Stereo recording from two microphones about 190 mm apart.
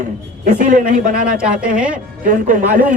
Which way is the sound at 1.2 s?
5° right (ahead or behind).